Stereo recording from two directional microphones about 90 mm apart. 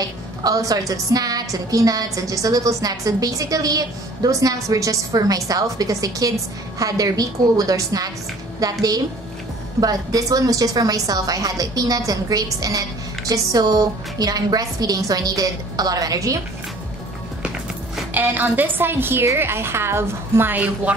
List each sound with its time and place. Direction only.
0.4 s a woman's voice: 45° right (ahead or behind)
18.1 s a woman's voice: 20° right (ahead or behind)